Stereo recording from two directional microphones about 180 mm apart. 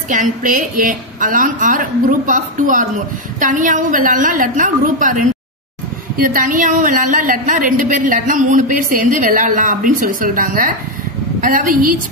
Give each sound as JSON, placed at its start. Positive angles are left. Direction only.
{"t": 0.1, "sound": "a woman's voice", "side_deg": -45}
{"t": 6.1, "sound": "a woman's voice", "side_deg": -50}